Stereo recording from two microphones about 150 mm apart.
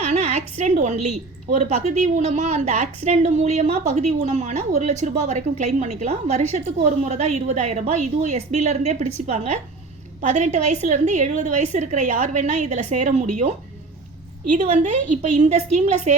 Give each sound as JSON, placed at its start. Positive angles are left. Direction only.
{"t": 0.0, "sound": "a sound", "side_deg": -45}
{"t": 0.6, "sound": "a woman's voice", "side_deg": -50}
{"t": 14.7, "sound": "a woman's voice", "side_deg": -55}